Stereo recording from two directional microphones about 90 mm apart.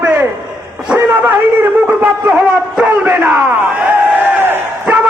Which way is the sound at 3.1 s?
25° right (ahead or behind).